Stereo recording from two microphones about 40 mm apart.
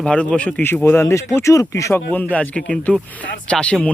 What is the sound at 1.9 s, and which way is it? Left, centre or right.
Speech, left.